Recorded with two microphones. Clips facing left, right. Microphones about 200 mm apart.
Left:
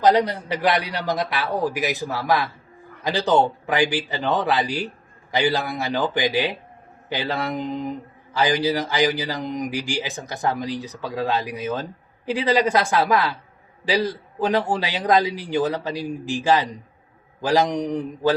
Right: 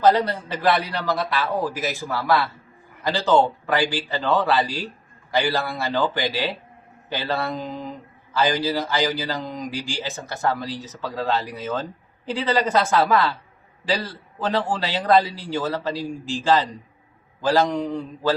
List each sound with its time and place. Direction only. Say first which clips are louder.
0.0 s speech: even; 15° left (ahead or behind)